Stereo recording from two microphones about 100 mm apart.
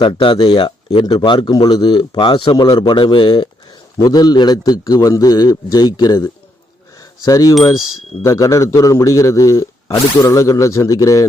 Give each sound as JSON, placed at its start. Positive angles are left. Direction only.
{"t": 0.0, "sound": "a man's voice", "side_deg": 55}
{"t": 3.9, "sound": "a man's voice", "side_deg": 40}
{"t": 7.0, "sound": "a sound", "side_deg": 35}
{"t": 8.2, "sound": "a man's voice", "side_deg": 30}